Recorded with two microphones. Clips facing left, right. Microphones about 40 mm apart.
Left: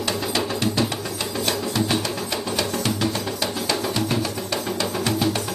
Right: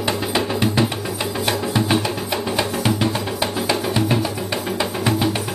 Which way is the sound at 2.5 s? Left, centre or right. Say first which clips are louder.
Right 4 dB; right.